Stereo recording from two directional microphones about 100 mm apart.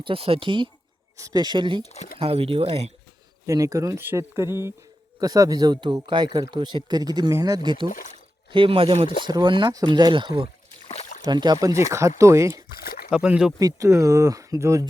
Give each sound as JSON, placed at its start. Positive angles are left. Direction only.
{"t": 0.0, "sound": "speech", "side_deg": -65}
{"t": 1.1, "sound": "speech", "side_deg": -35}
{"t": 1.8, "sound": "speech", "side_deg": 90}
{"t": 2.1, "sound": "speech", "side_deg": -75}
{"t": 3.4, "sound": "speech", "side_deg": -35}
{"t": 5.2, "sound": "speech", "side_deg": -40}
{"t": 8.5, "sound": "speech", "side_deg": -65}
{"t": 9.3, "sound": "speech", "side_deg": -50}
{"t": 11.3, "sound": "speech", "side_deg": -45}
{"t": 13.1, "sound": "speech", "side_deg": -10}
{"t": 13.6, "sound": "speech", "side_deg": -35}